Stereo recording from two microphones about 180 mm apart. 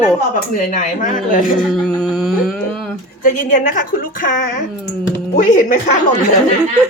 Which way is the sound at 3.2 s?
45° left (ahead or behind).